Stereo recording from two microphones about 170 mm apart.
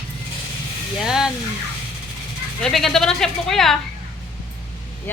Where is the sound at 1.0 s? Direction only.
Centre (ahead or behind).